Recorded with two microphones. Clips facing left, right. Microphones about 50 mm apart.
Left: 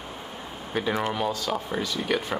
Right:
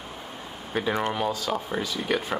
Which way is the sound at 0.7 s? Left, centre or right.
Centre.